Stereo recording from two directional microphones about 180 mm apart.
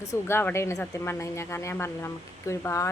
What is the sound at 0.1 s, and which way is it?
Speech, 15° left (ahead or behind).